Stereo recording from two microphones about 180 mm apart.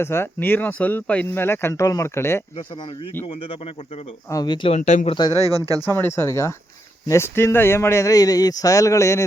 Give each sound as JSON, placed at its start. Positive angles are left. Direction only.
{"t": 0.0, "sound": "speech", "side_deg": 15}
{"t": 3.2, "sound": "speech", "side_deg": 30}
{"t": 4.8, "sound": "speech", "side_deg": 45}
{"t": 5.0, "sound": "speech", "side_deg": 25}
{"t": 5.8, "sound": "speech", "side_deg": 15}